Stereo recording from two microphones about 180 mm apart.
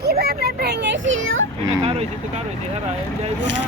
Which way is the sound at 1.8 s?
35° right (ahead or behind).